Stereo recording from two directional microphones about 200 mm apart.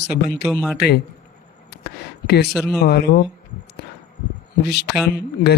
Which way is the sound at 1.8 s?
55° left (ahead or behind).